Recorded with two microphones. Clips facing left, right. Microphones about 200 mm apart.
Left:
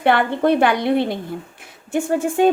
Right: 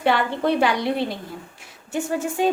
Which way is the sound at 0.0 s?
55° left (ahead or behind).